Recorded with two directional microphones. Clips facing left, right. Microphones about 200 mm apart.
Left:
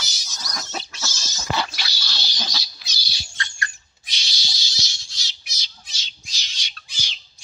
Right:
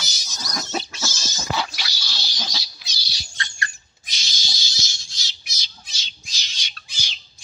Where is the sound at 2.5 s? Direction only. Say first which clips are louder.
Even; 15° right (ahead or behind).